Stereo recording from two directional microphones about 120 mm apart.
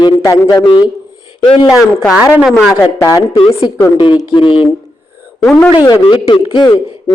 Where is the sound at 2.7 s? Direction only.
30° left (ahead or behind).